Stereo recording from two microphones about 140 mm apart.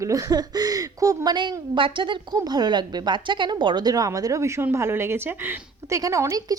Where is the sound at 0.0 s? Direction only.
25° right (ahead or behind).